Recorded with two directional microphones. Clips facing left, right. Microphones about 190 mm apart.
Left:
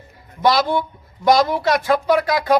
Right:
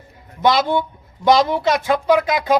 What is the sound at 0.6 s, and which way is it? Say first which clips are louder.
Speech: right 1 dB; centre (ahead or behind).